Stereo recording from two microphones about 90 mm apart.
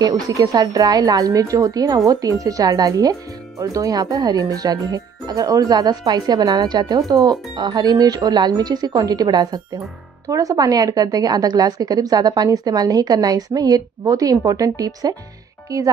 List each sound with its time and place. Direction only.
0.0 s speech: 45° right (ahead or behind)